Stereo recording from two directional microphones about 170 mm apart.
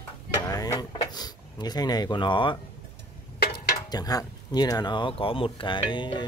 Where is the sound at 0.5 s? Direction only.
20° left (ahead or behind).